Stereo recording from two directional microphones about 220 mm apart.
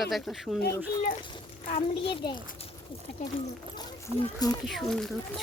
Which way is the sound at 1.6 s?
30° left (ahead or behind).